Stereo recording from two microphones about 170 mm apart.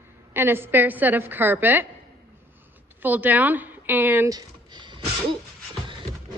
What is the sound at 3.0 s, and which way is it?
A woman's voice, 10° right (ahead or behind).